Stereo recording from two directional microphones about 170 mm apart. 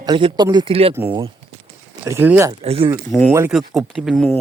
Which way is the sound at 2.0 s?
15° right (ahead or behind).